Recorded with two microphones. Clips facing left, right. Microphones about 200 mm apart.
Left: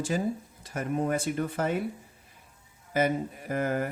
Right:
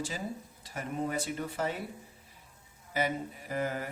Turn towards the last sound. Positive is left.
turn(degrees=50)  # may be behind; listen again after turning